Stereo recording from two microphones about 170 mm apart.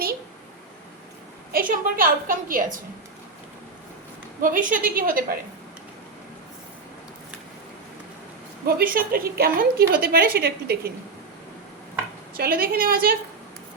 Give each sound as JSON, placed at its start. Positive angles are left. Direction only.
{"t": 1.5, "sound": "a woman's voice", "side_deg": -55}
{"t": 4.4, "sound": "a woman's voice", "side_deg": -55}
{"t": 8.6, "sound": "a woman's voice", "side_deg": -60}
{"t": 12.3, "sound": "a woman's voice", "side_deg": -60}